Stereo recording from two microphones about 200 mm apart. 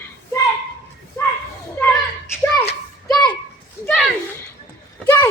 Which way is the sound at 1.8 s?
10° left (ahead or behind).